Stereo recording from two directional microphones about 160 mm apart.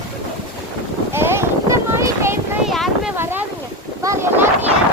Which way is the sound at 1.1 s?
15° right (ahead or behind).